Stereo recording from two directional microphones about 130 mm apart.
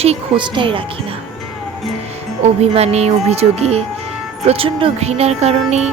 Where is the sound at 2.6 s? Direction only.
55° right (ahead or behind).